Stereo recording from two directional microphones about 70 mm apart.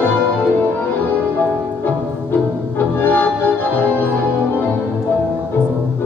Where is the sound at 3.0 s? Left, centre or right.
Left.